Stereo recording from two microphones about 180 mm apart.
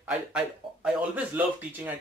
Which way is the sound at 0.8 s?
10° right (ahead or behind).